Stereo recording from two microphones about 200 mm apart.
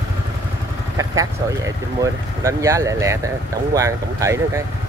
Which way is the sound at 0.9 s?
15° right (ahead or behind).